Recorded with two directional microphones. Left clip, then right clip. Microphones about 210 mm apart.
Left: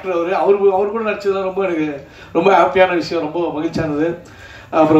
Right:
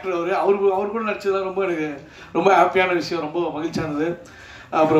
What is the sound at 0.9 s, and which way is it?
Speech, 55° right (ahead or behind).